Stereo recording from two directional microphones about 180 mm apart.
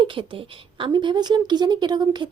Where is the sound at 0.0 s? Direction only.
30° right (ahead or behind).